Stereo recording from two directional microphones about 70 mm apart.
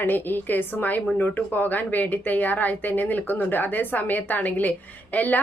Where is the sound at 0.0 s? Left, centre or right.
Left.